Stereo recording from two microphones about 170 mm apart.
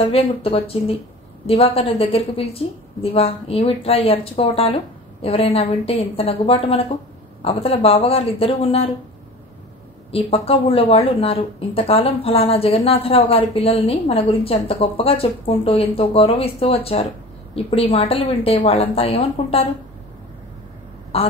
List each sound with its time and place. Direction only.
0.1 s speech: 35° left (ahead or behind)
10.1 s speech: 35° left (ahead or behind)
21.1 s speech: 35° left (ahead or behind)